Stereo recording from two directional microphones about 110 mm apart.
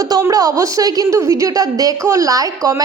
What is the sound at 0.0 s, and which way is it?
A woman's voice, 30° right (ahead or behind).